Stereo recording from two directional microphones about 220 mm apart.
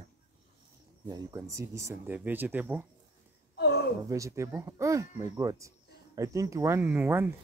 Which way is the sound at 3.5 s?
45° left (ahead or behind).